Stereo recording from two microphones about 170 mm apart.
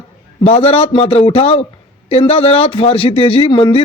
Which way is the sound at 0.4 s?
35° left (ahead or behind).